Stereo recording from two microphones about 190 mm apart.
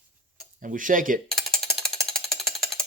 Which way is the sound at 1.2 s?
Centre (ahead or behind).